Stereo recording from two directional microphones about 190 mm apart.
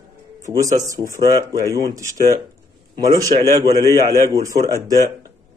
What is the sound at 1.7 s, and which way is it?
Speech, 15° right (ahead or behind).